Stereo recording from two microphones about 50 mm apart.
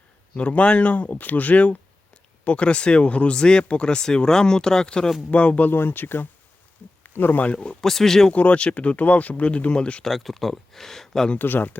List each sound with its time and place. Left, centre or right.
0.3 s speech: left
5.3 s speech: left
5.7 s speech: left
7.5 s speech: centre
7.9 s speech: centre
8.3 s speech: left
10.0 s speech: centre
11.3 s speech: left